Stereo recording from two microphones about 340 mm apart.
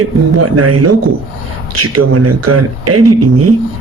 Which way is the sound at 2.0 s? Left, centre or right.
Right.